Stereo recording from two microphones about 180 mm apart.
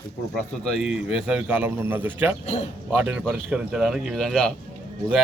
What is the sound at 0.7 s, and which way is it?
A man's voice, 5° right (ahead or behind).